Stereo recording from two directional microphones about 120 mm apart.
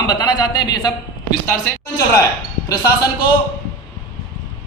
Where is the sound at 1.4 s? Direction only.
25° left (ahead or behind).